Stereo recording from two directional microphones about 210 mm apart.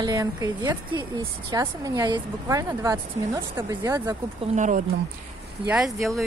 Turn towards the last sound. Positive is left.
turn(degrees=0)  # may be behind; listen again after turning